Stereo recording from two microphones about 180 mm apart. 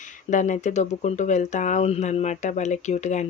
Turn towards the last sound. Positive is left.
turn(degrees=40)  # may be behind; listen again after turning